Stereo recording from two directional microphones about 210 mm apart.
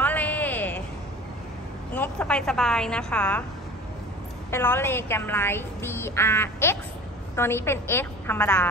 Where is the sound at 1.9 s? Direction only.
5° left (ahead or behind).